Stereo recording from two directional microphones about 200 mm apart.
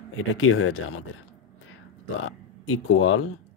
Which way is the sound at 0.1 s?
90° left.